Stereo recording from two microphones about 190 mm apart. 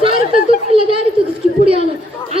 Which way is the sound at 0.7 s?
30° right (ahead or behind).